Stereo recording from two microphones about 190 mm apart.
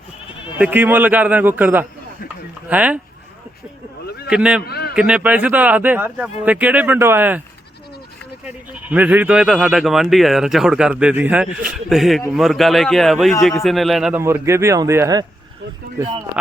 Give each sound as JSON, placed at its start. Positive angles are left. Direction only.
{"t": 0.6, "sound": "speech", "side_deg": -10}
{"t": 4.3, "sound": "speech", "side_deg": -5}
{"t": 4.6, "sound": "a man's voice", "side_deg": 55}
{"t": 4.9, "sound": "speech", "side_deg": -5}
{"t": 8.4, "sound": "speech", "side_deg": -10}
{"t": 14.2, "sound": "speech", "side_deg": -15}